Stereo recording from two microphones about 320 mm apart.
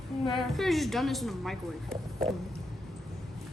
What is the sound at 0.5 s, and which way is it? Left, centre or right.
A woman's voice, centre.